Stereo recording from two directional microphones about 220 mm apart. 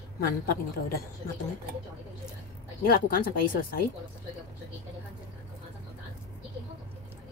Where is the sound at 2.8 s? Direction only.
40° left (ahead or behind).